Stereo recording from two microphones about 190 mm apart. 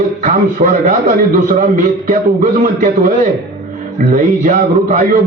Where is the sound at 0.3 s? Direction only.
45° right (ahead or behind).